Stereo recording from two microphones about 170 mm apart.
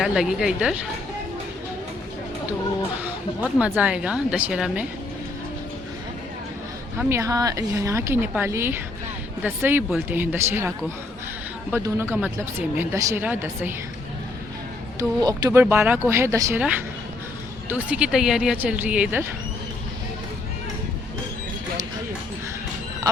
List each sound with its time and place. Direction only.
0.0 s a woman's voice: 5° right (ahead or behind)
3.6 s speech: 5° right (ahead or behind)
7.1 s speech: 20° right (ahead or behind)
14.9 s speech: 20° right (ahead or behind)